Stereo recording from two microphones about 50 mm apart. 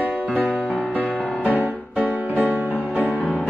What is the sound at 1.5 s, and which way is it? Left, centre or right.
Music, right.